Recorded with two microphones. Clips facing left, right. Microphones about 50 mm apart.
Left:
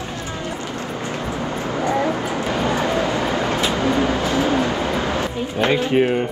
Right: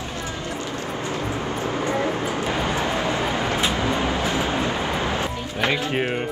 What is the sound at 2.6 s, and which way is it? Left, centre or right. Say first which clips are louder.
Vehicle: left 3 dB; left.